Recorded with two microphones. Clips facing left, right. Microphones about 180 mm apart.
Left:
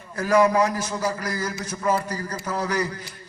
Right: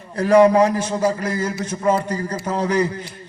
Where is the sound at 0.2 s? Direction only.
30° right (ahead or behind).